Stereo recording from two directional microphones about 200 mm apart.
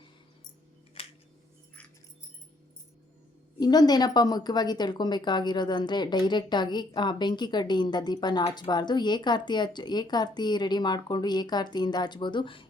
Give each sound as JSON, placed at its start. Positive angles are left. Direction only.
{"t": 1.0, "sound": "scissors", "side_deg": 30}
{"t": 3.6, "sound": "a woman's voice", "side_deg": 20}